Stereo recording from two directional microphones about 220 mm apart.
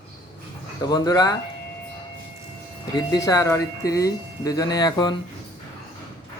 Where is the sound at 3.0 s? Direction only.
15° left (ahead or behind).